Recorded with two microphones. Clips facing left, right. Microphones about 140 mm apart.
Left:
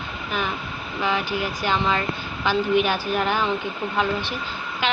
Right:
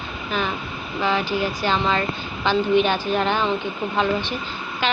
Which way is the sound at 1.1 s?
15° left (ahead or behind).